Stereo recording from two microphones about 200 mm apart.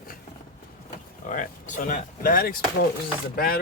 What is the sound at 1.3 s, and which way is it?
Speech, 40° left (ahead or behind).